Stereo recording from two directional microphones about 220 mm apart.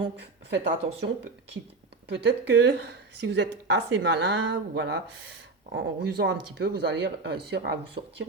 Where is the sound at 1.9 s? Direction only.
50° right (ahead or behind).